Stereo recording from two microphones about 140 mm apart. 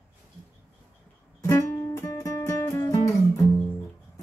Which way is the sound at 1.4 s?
20° left (ahead or behind).